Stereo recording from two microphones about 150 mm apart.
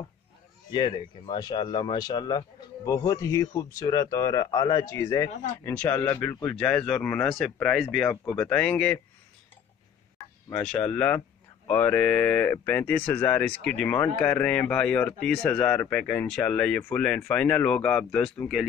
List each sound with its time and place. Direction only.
0.7 s speech: 35° left (ahead or behind); by 6.5 s 20° left (ahead or behind)
6.5 s speech: 5° left (ahead or behind)
10.6 s speech: 5° left (ahead or behind)